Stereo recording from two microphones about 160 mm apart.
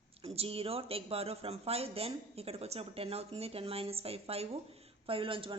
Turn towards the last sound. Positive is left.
turn(degrees=-35)  # may be behind; listen again after turning